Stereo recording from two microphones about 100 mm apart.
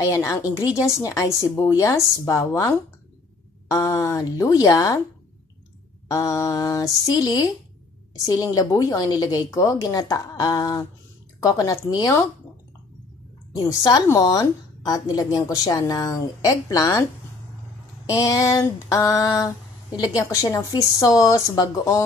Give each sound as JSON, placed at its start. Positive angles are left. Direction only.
{"t": 0.0, "sound": "a woman's voice", "side_deg": 30}
{"t": 3.7, "sound": "a woman's voice", "side_deg": 35}
{"t": 6.0, "sound": "a woman's voice", "side_deg": 35}
{"t": 13.5, "sound": "a woman's voice", "side_deg": 35}
{"t": 18.2, "sound": "a woman's voice", "side_deg": 35}